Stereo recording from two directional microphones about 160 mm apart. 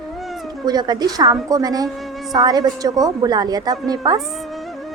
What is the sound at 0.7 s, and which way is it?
A woman's voice, 25° right (ahead or behind).